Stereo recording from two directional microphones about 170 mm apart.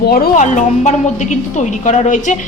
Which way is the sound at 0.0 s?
65° left (ahead or behind).